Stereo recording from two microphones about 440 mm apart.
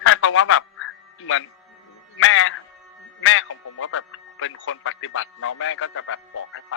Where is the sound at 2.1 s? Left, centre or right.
Left.